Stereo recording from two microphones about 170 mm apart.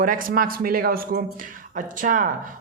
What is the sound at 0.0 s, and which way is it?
A man's voice, 55° right (ahead or behind).